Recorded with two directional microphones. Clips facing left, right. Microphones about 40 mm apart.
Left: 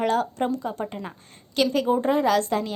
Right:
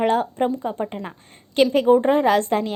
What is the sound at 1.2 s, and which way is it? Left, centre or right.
A woman's voice, right.